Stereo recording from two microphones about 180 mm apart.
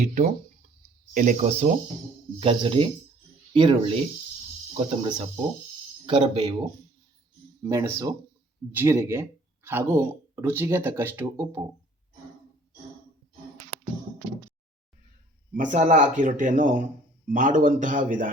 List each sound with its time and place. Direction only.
0.0 s speech: 40° right (ahead or behind)
7.6 s speech: 15° right (ahead or behind)
15.5 s speech: 45° right (ahead or behind)